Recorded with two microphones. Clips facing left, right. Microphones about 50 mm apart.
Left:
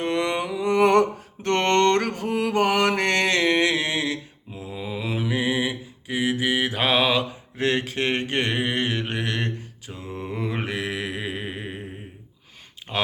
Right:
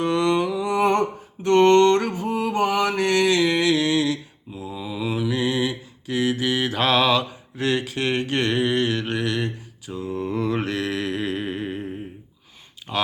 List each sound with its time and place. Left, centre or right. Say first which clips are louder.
0.0 s humming: right 4 dB; left
0.6 s humming: left 2 dB; left
1.5 s mantra: right 5 dB; left; by 7.3 s centre
7.5 s mantra: even; left; by 11.8 s centre
12.9 s typing: right 1 dB; centre